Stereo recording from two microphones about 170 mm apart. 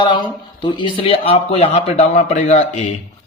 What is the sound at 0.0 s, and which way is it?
Speech, 25° left (ahead or behind).